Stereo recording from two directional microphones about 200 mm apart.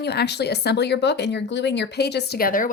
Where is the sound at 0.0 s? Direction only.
55° left (ahead or behind).